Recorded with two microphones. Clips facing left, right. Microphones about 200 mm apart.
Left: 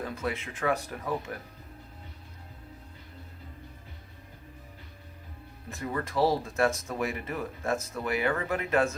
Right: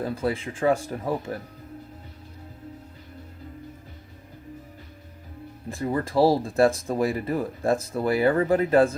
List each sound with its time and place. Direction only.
0.0 s speech: 35° right (ahead or behind)
5.6 s speech: 30° right (ahead or behind)